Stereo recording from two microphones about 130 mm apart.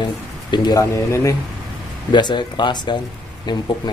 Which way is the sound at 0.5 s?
30° left (ahead or behind).